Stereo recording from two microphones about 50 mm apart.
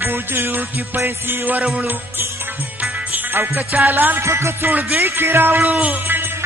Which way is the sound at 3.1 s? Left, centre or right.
Right.